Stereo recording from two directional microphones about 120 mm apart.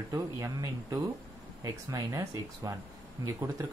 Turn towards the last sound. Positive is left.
turn(degrees=-25)  # may be behind; listen again after turning